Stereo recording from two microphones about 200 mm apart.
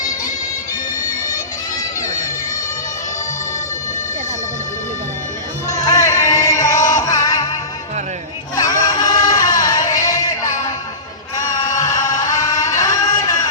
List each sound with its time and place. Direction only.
2.0 s music: 15° left (ahead or behind)
5.8 s music: 15° left (ahead or behind)
8.6 s music: 20° left (ahead or behind)
11.3 s music: 15° left (ahead or behind)